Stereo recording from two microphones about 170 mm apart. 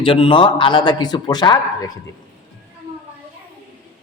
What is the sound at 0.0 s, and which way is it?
Speech, 30° left (ahead or behind).